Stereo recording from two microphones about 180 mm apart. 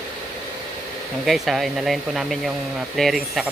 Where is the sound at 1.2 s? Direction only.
Centre (ahead or behind).